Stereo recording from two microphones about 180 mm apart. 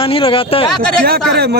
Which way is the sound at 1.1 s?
60° right (ahead or behind).